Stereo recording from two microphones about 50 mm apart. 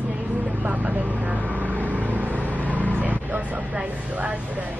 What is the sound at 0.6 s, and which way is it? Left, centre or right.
Vehicle, right.